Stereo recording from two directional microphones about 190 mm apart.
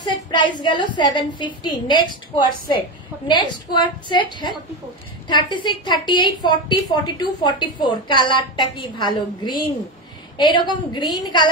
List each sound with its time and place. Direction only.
0.0 s a woman's voice: 25° left (ahead or behind)